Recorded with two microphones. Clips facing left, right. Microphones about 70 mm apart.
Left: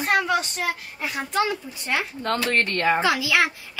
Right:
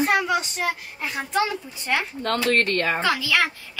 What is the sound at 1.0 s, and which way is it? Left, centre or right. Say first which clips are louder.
A child's voice: even; centre.